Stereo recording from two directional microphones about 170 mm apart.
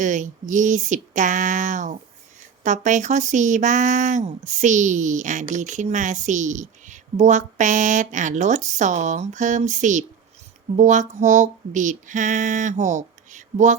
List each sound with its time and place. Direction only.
0.0 s speech: 45° right (ahead or behind)